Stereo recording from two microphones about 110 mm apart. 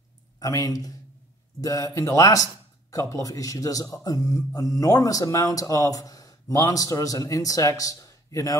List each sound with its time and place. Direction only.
0.4 s speech: 30° left (ahead or behind)